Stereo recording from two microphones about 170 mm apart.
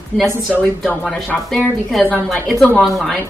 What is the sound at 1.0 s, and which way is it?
A woman's voice, 5° left (ahead or behind).